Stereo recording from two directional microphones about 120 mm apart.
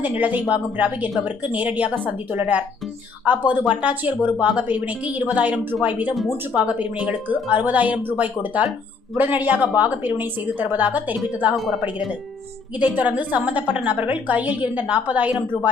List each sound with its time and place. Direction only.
0.0 s a woman's voice: 15° right (ahead or behind)
6.1 s a woman's voice: centre (ahead or behind)
11.5 s speech: centre (ahead or behind)
12.8 s a woman's voice: 15° right (ahead or behind)